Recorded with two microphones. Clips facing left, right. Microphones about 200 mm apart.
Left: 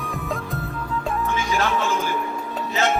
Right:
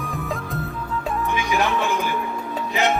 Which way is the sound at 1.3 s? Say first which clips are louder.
Right 2 dB; 15° right (ahead or behind).